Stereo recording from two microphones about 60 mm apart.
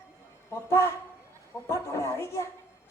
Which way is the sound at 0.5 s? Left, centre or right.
Left.